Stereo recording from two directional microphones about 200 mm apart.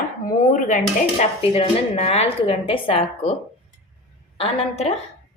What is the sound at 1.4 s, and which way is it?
A woman's voice, 30° left (ahead or behind).